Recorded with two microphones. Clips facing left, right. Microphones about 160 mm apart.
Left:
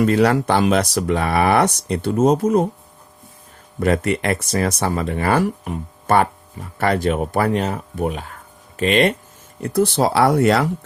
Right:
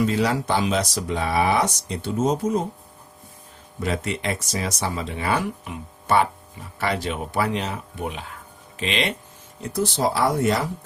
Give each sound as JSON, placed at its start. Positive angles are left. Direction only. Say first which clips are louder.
{"t": 0.0, "sound": "speech", "louder": "left 6 dB", "side_deg": 65}
{"t": 3.8, "sound": "speech", "louder": "left 8 dB", "side_deg": 60}
{"t": 9.6, "sound": "speech", "louder": "left 6 dB", "side_deg": 60}